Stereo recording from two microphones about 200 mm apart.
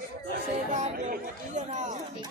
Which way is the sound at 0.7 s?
35° right (ahead or behind).